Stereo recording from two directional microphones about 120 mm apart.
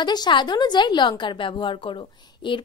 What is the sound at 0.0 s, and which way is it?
A woman's voice, 35° left (ahead or behind).